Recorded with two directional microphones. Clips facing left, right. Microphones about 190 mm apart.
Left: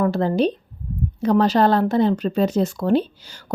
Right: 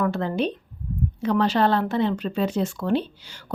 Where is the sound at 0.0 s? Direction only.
35° left (ahead or behind).